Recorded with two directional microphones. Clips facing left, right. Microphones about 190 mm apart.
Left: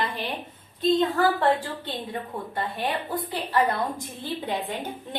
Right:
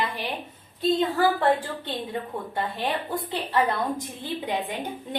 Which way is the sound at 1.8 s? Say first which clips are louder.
Right 2 dB; 20° right (ahead or behind).